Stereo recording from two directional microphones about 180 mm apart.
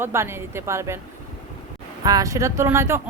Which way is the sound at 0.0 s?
15° right (ahead or behind).